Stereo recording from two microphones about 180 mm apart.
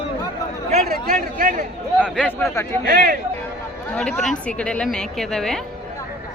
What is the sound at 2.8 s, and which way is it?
Speech, 55° right (ahead or behind).